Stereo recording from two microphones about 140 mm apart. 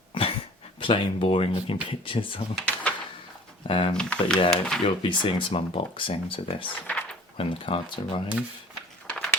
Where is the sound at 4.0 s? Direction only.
5° left (ahead or behind).